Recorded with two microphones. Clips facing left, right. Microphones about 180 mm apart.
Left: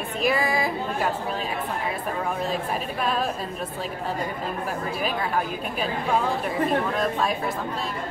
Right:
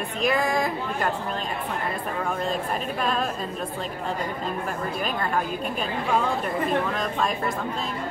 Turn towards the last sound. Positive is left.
turn(degrees=0)  # may be behind; listen again after turning